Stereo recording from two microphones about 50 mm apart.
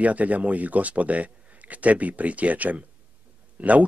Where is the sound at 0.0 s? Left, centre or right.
Right.